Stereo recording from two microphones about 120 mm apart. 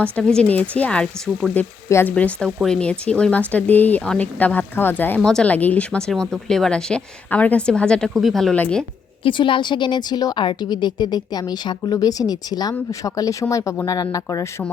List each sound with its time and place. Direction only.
0.0 s speech: 5° left (ahead or behind)
8.5 s speech: 15° left (ahead or behind)
9.2 s a woman's voice: 45° left (ahead or behind)